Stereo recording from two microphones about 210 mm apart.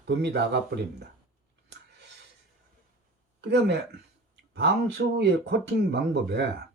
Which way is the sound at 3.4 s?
55° right (ahead or behind).